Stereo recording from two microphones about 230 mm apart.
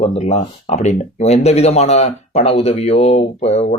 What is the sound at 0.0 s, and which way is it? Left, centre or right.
Speech, left.